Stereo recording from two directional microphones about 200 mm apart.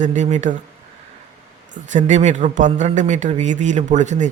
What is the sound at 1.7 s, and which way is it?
A man's voice, 40° right (ahead or behind).